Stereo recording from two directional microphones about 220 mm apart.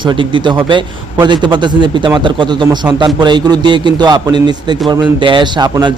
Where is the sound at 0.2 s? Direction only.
20° right (ahead or behind).